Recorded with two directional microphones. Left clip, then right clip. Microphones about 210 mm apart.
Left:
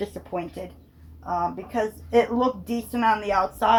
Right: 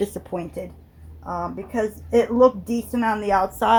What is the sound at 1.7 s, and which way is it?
Speech, 35° right (ahead or behind).